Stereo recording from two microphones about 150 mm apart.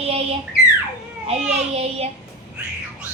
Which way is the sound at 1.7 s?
45° right (ahead or behind).